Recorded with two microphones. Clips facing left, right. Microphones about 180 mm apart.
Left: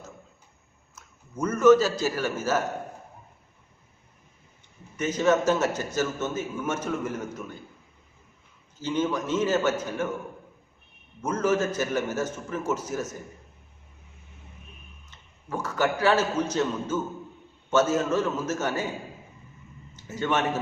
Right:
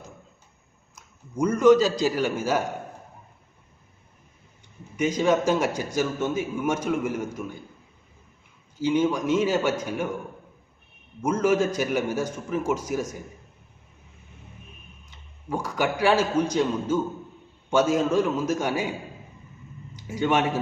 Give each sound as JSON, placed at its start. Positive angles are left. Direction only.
{"t": 0.9, "sound": "a man's voice", "side_deg": -15}
{"t": 4.9, "sound": "a man's voice", "side_deg": -10}
{"t": 8.8, "sound": "a man's voice", "side_deg": -10}
{"t": 11.2, "sound": "a man's voice", "side_deg": -10}
{"t": 15.1, "sound": "a man's voice", "side_deg": -10}
{"t": 20.0, "sound": "a man's voice", "side_deg": -15}